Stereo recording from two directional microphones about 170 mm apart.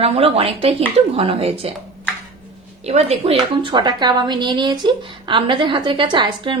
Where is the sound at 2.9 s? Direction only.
40° right (ahead or behind).